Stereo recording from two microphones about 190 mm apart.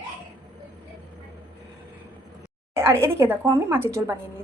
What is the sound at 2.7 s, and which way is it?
A woman's voice, 15° right (ahead or behind).